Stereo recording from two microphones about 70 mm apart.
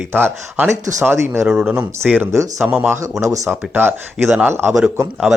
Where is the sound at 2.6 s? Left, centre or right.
Centre.